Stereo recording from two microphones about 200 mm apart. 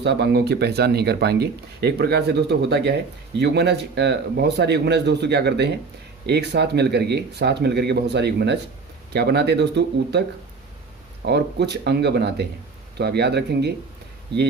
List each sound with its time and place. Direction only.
0.0 s speech: 55° right (ahead or behind)
11.3 s speech: 55° right (ahead or behind)